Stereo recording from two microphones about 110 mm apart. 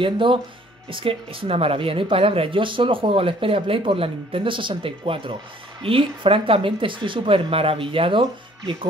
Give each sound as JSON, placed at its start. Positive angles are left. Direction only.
{"t": 0.0, "sound": "speech", "side_deg": -50}